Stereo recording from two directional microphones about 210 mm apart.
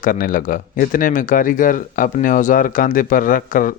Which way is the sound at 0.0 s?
40° left (ahead or behind).